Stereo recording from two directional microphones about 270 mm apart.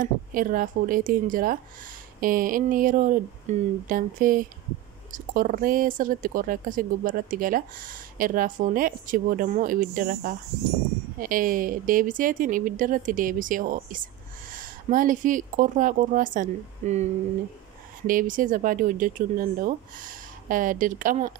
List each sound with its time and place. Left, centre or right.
0.0 s speech: right